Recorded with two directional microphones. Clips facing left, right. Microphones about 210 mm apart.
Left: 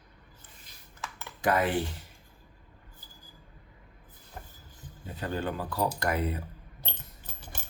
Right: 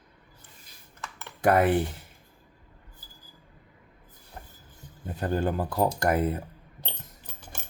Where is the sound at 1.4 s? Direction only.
55° right (ahead or behind).